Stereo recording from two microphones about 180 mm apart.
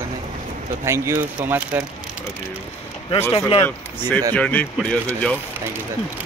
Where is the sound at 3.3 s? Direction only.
30° left (ahead or behind).